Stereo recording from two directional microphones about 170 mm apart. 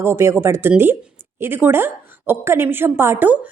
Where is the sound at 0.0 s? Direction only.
15° right (ahead or behind).